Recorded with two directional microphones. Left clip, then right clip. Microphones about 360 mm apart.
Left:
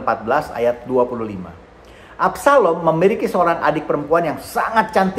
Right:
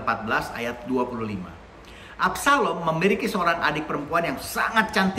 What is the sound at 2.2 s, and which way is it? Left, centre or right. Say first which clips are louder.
A man's voice: left 7 dB; centre.